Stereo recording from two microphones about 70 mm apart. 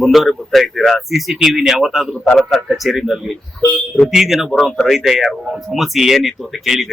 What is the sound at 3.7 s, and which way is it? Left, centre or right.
Speech, centre.